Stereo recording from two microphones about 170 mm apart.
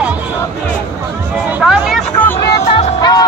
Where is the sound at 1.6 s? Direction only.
Centre (ahead or behind).